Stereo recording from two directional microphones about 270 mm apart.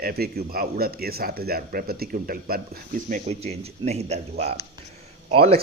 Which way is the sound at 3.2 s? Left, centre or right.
Right.